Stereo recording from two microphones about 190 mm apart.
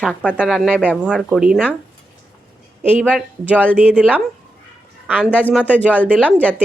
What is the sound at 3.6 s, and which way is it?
Speech, 10° right (ahead or behind).